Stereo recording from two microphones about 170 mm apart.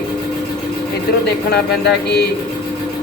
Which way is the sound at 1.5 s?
70° left (ahead or behind).